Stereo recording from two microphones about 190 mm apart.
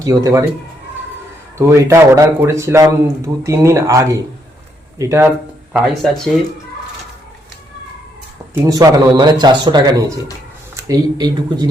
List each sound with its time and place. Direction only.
0.0 s speech: 20° right (ahead or behind)
1.5 s a man's voice: 15° right (ahead or behind)
5.7 s speech: centre (ahead or behind)
8.6 s speech: 20° right (ahead or behind)